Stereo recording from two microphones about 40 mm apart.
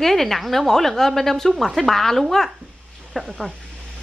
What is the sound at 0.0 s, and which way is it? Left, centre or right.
A woman's voice, centre.